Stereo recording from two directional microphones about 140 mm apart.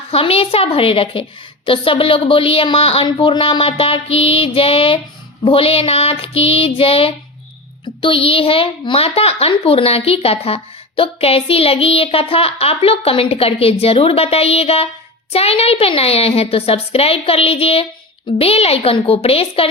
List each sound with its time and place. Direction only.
0.1 s a child's voice: 45° left (ahead or behind)